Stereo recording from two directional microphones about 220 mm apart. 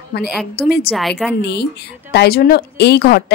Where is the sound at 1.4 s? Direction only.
50° left (ahead or behind).